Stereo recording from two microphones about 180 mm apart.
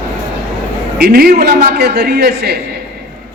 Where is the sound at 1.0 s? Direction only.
60° right (ahead or behind).